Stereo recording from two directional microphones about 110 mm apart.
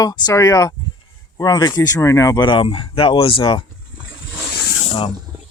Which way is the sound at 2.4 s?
50° left (ahead or behind).